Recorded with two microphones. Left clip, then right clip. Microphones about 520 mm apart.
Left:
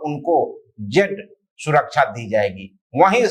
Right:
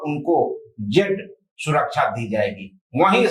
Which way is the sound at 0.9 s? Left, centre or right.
Left.